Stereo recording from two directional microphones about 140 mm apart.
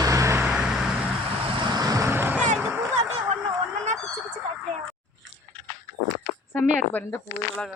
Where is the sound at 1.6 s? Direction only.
25° right (ahead or behind).